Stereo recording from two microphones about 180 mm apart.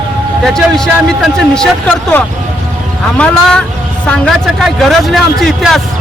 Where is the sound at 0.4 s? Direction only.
5° left (ahead or behind).